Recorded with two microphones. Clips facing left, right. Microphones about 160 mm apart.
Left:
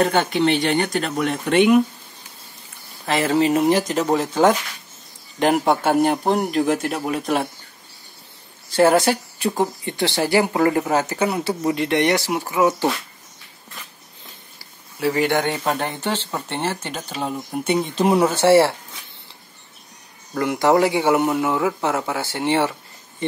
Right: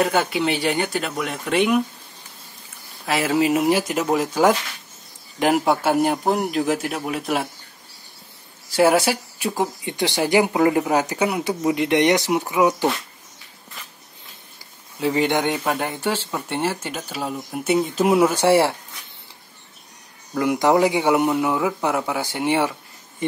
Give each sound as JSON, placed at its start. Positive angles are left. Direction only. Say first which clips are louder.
{"t": 0.0, "sound": "a man's voice", "louder": "left 2 dB", "side_deg": -5}
{"t": 3.1, "sound": "a man's voice", "louder": "left 1 dB", "side_deg": -10}
{"t": 8.6, "sound": "speech", "louder": "left 1 dB", "side_deg": -10}
{"t": 15.0, "sound": "speech", "louder": "even", "side_deg": -20}
{"t": 20.3, "sound": "speech", "louder": "even", "side_deg": -15}